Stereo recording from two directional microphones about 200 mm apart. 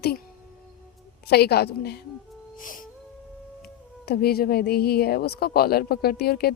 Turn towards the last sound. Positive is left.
turn(degrees=50)  # may be behind; listen again after turning